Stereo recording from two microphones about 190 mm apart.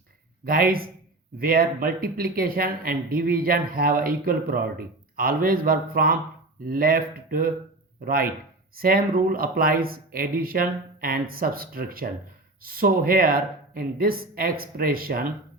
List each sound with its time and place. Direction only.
0.4 s speech: 50° right (ahead or behind)